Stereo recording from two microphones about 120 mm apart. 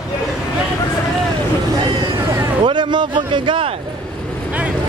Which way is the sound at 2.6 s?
40° right (ahead or behind).